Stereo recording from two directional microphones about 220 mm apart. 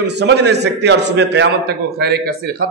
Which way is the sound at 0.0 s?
50° right (ahead or behind).